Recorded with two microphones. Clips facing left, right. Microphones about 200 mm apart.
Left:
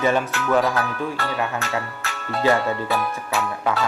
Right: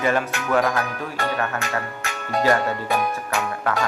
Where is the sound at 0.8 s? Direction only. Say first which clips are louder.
Left 1 dB; 15° right (ahead or behind).